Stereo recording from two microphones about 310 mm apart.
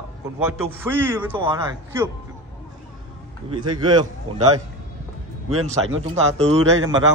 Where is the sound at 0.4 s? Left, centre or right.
Centre.